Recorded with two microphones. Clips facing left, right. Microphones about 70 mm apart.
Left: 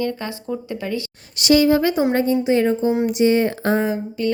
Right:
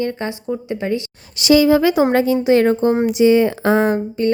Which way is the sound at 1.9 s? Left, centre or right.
Right.